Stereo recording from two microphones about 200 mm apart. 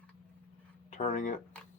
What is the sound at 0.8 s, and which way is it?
Speech, 40° left (ahead or behind).